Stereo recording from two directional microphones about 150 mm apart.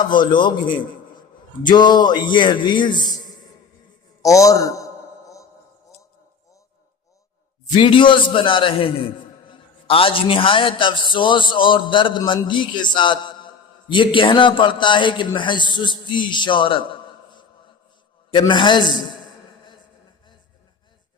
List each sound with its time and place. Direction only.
0.0 s a man's voice: 30° left (ahead or behind)
4.3 s a man's voice: 20° left (ahead or behind)
7.7 s a man's voice: 35° left (ahead or behind)